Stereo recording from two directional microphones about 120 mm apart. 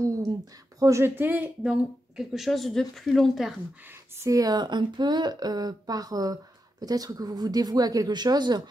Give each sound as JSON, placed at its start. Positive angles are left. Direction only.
{"t": 0.7, "sound": "a woman's voice", "side_deg": -25}
{"t": 3.8, "sound": "speech", "side_deg": -20}